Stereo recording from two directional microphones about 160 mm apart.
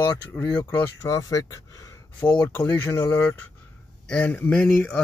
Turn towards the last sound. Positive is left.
turn(degrees=10)  # may be behind; listen again after turning